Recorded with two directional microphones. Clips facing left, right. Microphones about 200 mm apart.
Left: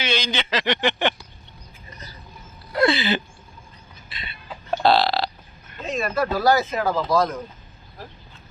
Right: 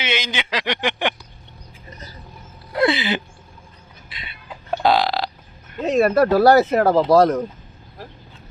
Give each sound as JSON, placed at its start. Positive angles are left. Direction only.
{"t": 0.0, "sound": "speech", "side_deg": -20}
{"t": 2.7, "sound": "a sound", "side_deg": -20}
{"t": 4.1, "sound": "burping", "side_deg": -15}
{"t": 5.8, "sound": "speech", "side_deg": -65}